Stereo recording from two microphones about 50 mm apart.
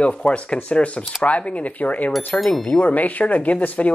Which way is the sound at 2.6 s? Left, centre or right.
Left.